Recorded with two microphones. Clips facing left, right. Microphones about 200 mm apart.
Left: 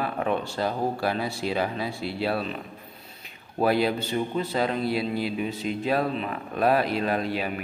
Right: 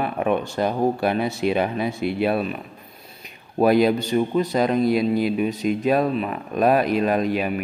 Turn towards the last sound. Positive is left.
turn(degrees=-15)  # may be behind; listen again after turning